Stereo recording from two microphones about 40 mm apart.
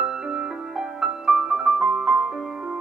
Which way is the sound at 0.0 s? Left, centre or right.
Centre.